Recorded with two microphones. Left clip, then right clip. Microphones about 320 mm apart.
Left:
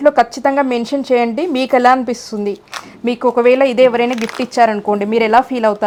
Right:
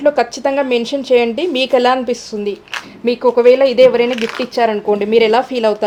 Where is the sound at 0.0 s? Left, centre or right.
Left.